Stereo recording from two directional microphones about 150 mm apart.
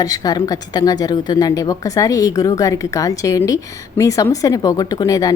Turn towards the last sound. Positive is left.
turn(degrees=25)  # may be behind; listen again after turning